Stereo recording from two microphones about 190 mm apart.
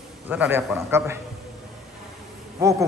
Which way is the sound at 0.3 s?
10° right (ahead or behind).